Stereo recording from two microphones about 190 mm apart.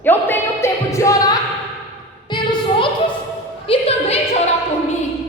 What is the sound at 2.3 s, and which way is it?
Music, 25° left (ahead or behind).